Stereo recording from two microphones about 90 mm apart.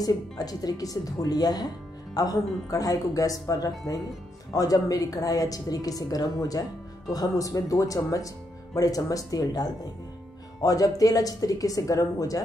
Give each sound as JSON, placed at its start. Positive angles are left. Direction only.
{"t": 0.0, "sound": "a woman's voice", "side_deg": 45}